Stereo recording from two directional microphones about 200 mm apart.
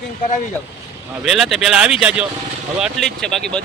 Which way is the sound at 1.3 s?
Centre (ahead or behind).